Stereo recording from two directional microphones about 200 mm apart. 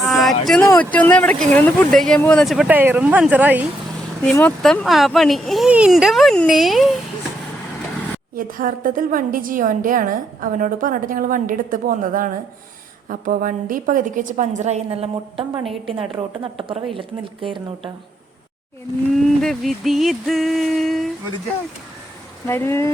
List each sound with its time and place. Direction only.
0.1 s a sound: centre (ahead or behind)
0.4 s speech: 5° left (ahead or behind)
4.4 s speech: 5° left (ahead or behind)
8.4 s a woman's voice: 45° right (ahead or behind); by 17.9 s 25° right (ahead or behind)
19.1 s speech: centre (ahead or behind)
22.4 s speech: 10° left (ahead or behind)